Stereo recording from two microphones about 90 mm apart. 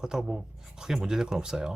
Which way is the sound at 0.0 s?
5° right (ahead or behind).